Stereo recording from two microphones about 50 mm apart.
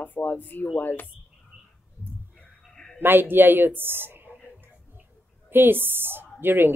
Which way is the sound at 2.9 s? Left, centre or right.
Right.